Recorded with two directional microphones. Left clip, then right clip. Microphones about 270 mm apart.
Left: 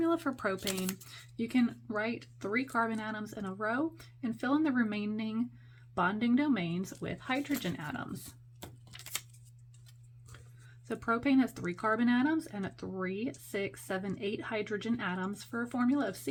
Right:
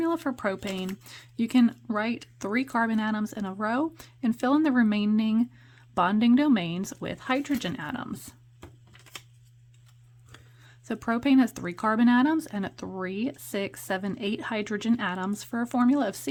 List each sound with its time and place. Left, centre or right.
0.0 s speech: right
8.9 s shuffling cards: left
10.8 s speech: right